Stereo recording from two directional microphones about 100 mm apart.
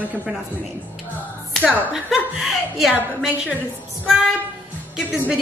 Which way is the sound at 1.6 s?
10° right (ahead or behind).